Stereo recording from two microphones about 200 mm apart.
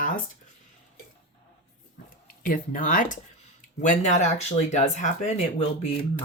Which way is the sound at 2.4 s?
45° left (ahead or behind).